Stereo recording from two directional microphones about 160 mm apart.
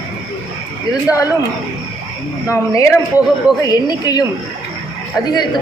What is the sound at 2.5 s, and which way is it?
Speech, 15° left (ahead or behind).